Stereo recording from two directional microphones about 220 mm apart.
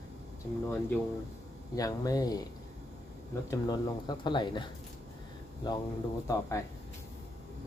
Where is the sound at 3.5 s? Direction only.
20° left (ahead or behind).